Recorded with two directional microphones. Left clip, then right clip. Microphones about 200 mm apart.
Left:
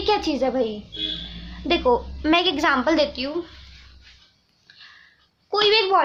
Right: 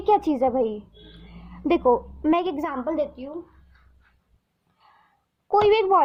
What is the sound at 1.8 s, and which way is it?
Speech, 20° right (ahead or behind).